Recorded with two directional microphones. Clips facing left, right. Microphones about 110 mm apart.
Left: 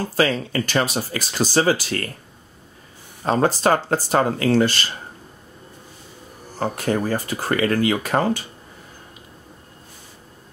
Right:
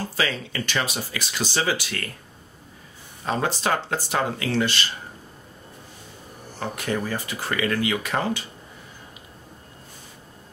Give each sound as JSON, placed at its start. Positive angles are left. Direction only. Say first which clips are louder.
{"t": 0.1, "sound": "speech", "louder": "left 7 dB", "side_deg": 45}
{"t": 3.3, "sound": "speech", "louder": "left 6 dB", "side_deg": 40}
{"t": 6.6, "sound": "speech", "louder": "left 5 dB", "side_deg": 40}